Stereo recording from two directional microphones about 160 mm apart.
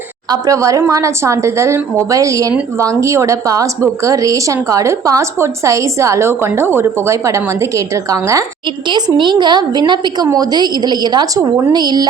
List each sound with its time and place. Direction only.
0.3 s speech: 20° right (ahead or behind)